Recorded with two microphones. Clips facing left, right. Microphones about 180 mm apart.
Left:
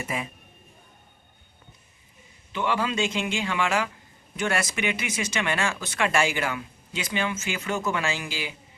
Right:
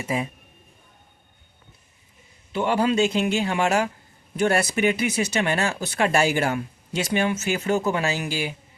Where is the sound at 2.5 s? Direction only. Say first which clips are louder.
Right 5 dB; 40° right (ahead or behind).